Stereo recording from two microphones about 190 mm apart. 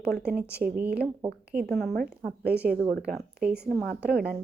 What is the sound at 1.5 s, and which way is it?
Speech, 55° right (ahead or behind).